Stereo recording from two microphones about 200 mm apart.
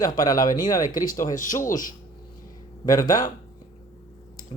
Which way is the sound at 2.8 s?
20° left (ahead or behind).